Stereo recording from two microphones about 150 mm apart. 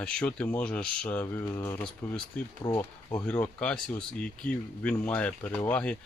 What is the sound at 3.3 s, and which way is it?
Speech, 10° left (ahead or behind).